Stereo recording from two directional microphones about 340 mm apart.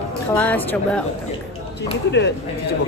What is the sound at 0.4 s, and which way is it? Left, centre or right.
Speech, centre.